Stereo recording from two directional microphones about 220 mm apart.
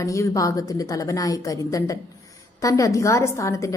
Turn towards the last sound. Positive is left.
turn(degrees=15)  # may be behind; listen again after turning